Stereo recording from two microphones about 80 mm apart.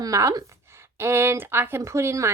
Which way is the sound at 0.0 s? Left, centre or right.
Right.